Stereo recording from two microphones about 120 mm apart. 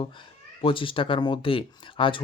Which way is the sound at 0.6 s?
45° left (ahead or behind).